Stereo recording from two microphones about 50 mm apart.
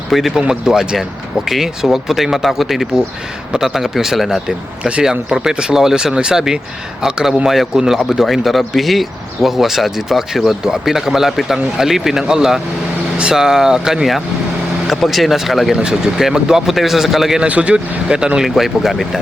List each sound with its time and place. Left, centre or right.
0.1 s speech: centre
0.3 s speech: centre
4.4 s speech: right; by 17.4 s centre
17.4 s speech: right
18.4 s speech: centre